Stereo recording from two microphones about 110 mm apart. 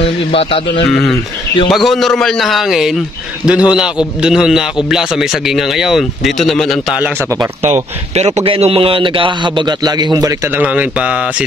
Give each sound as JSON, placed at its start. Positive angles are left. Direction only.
{"t": 0.0, "sound": "a man's voice", "side_deg": 60}
{"t": 0.8, "sound": "a man's voice", "side_deg": 0}
{"t": 7.2, "sound": "speech", "side_deg": -25}
{"t": 7.7, "sound": "a man's voice", "side_deg": -80}
{"t": 10.5, "sound": "speech", "side_deg": -15}